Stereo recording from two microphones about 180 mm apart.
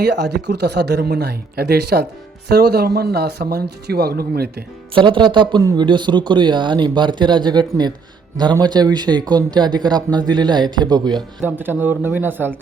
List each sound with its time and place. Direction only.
0.0 s speech: 65° right (ahead or behind)
4.9 s speech: 30° right (ahead or behind)
11.4 s speech: 10° right (ahead or behind)